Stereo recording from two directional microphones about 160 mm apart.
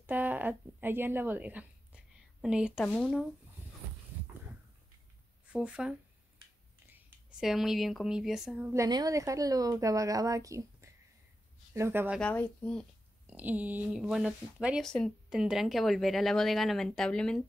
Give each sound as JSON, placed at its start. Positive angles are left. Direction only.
{"t": 0.0, "sound": "a woman's voice", "side_deg": -10}
{"t": 2.8, "sound": "speech", "side_deg": 5}
{"t": 5.5, "sound": "speech", "side_deg": -5}
{"t": 8.8, "sound": "a woman's voice", "side_deg": -25}
{"t": 12.2, "sound": "speech", "side_deg": 5}
{"t": 13.3, "sound": "speech", "side_deg": -10}